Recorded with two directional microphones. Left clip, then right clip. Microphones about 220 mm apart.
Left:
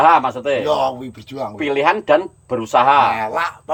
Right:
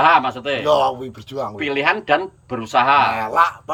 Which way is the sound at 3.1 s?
Centre (ahead or behind).